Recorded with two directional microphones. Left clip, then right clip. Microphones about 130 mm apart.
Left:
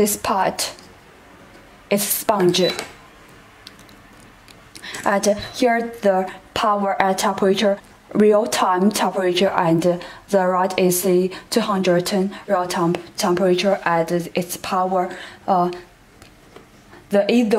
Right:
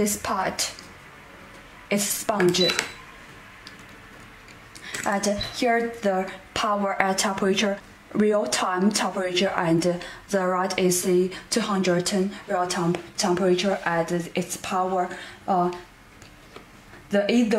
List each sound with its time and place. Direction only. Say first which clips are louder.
0.0 s a woman's voice: left 7 dB; 25° left (ahead or behind)
1.9 s a woman's voice: left 6 dB; 25° left (ahead or behind)
5.0 s a woman's voice: left 7 dB; 30° left (ahead or behind)
17.1 s a woman's voice: left 5 dB; 25° left (ahead or behind)